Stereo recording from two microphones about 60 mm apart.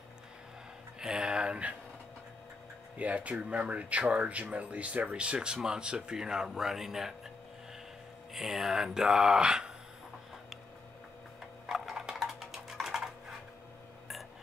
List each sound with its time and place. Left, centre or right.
0.9 s a sound: centre
3.0 s speech: right; by 7.2 s centre
8.3 s speech: centre
11.7 s typing: centre